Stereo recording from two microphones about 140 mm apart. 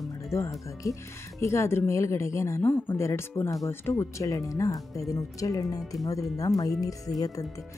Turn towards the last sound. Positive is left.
turn(degrees=25)  # may be behind; listen again after turning